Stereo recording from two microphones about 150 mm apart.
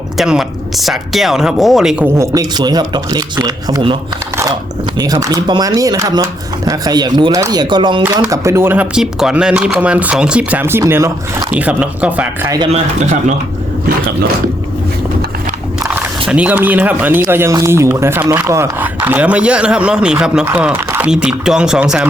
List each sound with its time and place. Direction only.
0.2 s speech: centre (ahead or behind)
2.1 s a man's voice: 20° right (ahead or behind)
4.9 s a man's voice: 25° right (ahead or behind)
8.3 s speech: 20° right (ahead or behind)
12.7 s speech: 50° right (ahead or behind)
16.3 s speech: 10° right (ahead or behind)